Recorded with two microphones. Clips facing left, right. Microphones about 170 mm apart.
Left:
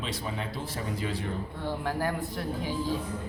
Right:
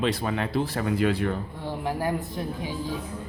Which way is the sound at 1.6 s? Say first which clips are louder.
Right 2 dB; 15° right (ahead or behind).